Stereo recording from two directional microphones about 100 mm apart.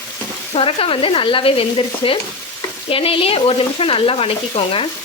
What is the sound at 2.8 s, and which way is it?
Speech, 70° left (ahead or behind).